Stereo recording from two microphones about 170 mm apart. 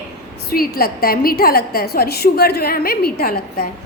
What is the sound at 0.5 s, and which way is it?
A woman's voice, 60° left (ahead or behind).